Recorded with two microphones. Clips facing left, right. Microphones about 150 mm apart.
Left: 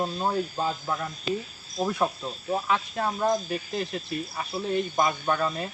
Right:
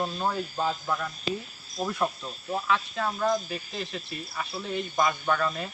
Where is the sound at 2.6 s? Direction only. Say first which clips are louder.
Right 2 dB; 30° left (ahead or behind).